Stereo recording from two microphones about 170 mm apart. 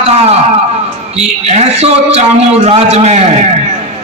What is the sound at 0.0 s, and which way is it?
Speech, 40° right (ahead or behind).